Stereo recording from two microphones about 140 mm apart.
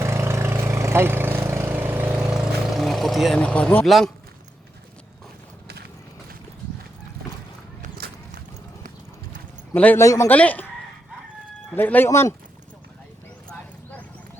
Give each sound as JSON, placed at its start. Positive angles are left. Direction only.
{"t": 0.0, "sound": "vehicle", "side_deg": -20}
{"t": 3.8, "sound": "a man's voice", "side_deg": 0}
{"t": 7.8, "sound": "a sound", "side_deg": -75}
{"t": 9.7, "sound": "speech", "side_deg": 10}
{"t": 10.0, "sound": "a man's voice", "side_deg": 20}
{"t": 10.3, "sound": "speech", "side_deg": 10}
{"t": 11.7, "sound": "speech", "side_deg": 15}